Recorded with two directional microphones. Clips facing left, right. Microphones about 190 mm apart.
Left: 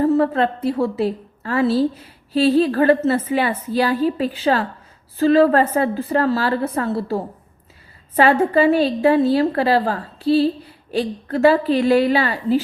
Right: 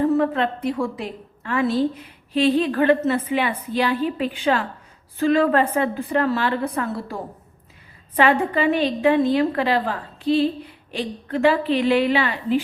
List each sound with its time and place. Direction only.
0.0 s a woman's voice: 35° left (ahead or behind)